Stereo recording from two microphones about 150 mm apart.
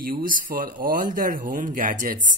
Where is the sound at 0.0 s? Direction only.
70° right (ahead or behind).